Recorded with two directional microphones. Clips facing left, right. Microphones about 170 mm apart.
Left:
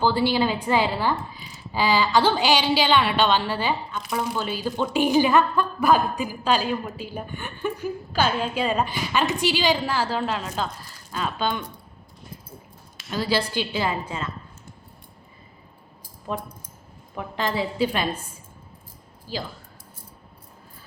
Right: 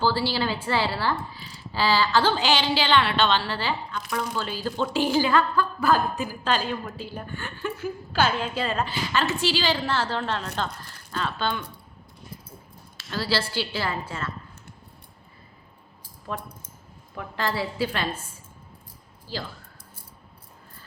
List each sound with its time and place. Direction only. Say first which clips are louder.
0.0 s a woman's voice: left 3 dB; 20° left (ahead or behind)
13.0 s a woman's voice: left 3 dB; 15° left (ahead or behind)
16.3 s a woman's voice: left 3 dB; 20° left (ahead or behind)
19.3 s a woman's voice: left 2 dB; 15° left (ahead or behind)